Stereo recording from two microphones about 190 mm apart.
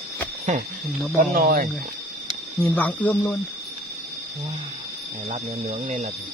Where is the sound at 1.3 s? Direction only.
50° right (ahead or behind).